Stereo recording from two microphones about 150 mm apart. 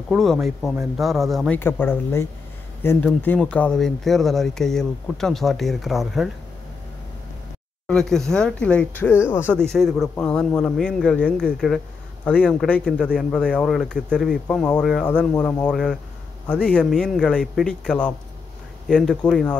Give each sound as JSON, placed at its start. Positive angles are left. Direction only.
{"t": 0.1, "sound": "speech", "side_deg": 0}
{"t": 1.6, "sound": "speech", "side_deg": 15}
{"t": 7.9, "sound": "speech", "side_deg": 5}
{"t": 9.6, "sound": "speech", "side_deg": 5}